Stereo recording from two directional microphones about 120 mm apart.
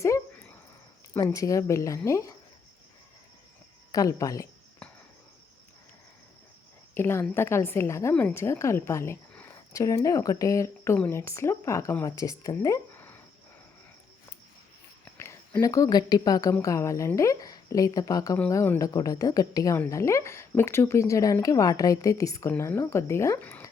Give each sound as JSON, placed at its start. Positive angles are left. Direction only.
{"t": 1.2, "sound": "a woman's voice", "side_deg": 30}
{"t": 3.9, "sound": "a woman's voice", "side_deg": 30}
{"t": 6.9, "sound": "a woman's voice", "side_deg": 20}
{"t": 15.2, "sound": "a woman's voice", "side_deg": 20}